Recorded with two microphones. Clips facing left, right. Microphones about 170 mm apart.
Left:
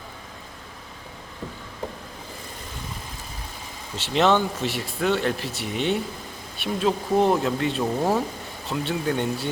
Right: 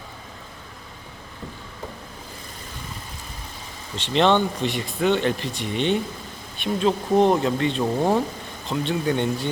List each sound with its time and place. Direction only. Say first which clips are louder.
3.9 s speech: right 1 dB; 5° left (ahead or behind)